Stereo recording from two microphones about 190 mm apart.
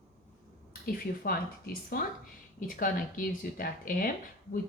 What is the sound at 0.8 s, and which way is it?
Speech, 50° left (ahead or behind).